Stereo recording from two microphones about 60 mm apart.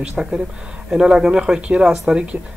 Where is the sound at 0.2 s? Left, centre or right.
Centre.